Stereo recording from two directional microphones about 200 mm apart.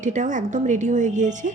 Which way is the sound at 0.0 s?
40° right (ahead or behind).